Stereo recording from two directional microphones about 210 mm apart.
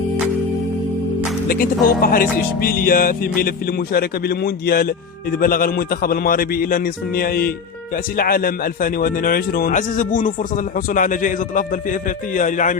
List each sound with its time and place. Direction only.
1.5 s music: 45° left (ahead or behind)
7.9 s a man's voice: 45° left (ahead or behind)